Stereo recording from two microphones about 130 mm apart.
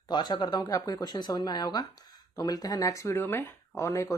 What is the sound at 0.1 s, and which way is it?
Speech, 35° left (ahead or behind).